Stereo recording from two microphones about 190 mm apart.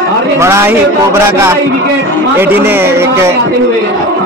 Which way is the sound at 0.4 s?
15° right (ahead or behind).